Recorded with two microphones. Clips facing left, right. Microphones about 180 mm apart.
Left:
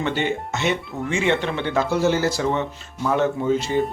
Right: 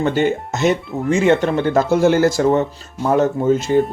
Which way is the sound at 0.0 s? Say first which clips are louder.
Right 6 dB; 45° right (ahead or behind).